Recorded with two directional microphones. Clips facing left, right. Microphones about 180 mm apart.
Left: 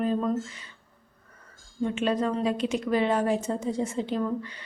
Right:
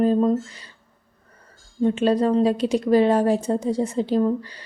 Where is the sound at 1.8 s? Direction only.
35° right (ahead or behind).